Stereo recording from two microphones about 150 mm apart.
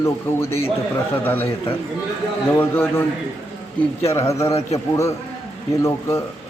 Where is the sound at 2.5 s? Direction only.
15° left (ahead or behind).